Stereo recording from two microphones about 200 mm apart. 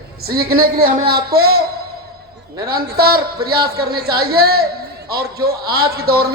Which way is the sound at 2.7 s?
50° right (ahead or behind).